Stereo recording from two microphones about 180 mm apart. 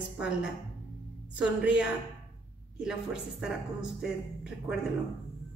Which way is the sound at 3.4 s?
5° right (ahead or behind).